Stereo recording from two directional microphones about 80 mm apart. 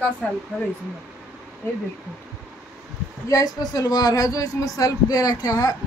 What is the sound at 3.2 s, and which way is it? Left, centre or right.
Speech, left.